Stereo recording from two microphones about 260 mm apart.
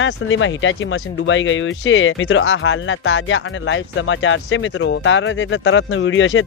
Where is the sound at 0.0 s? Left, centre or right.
Left.